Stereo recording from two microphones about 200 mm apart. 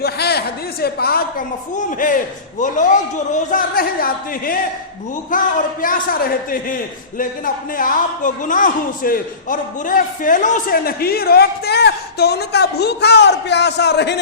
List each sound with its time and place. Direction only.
0.0 s a man's voice: 55° left (ahead or behind)